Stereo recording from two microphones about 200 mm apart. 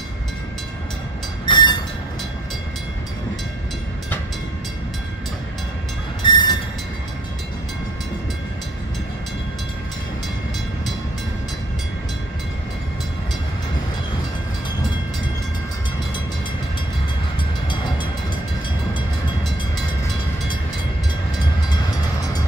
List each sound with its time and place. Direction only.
1.4 s train: 20° left (ahead or behind)
6.2 s train: 20° left (ahead or behind)